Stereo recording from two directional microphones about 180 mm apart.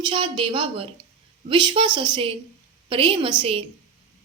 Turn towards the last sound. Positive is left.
turn(degrees=-30)  # may be behind; listen again after turning